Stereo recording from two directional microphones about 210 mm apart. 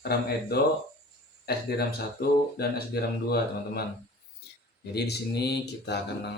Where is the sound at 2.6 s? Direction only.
50° left (ahead or behind).